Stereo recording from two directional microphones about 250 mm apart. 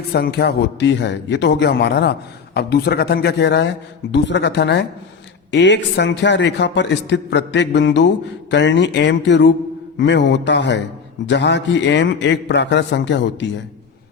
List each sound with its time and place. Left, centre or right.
0.1 s a man's voice: left